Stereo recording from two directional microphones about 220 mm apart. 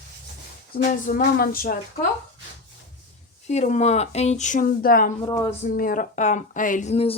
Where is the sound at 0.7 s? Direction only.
40° left (ahead or behind).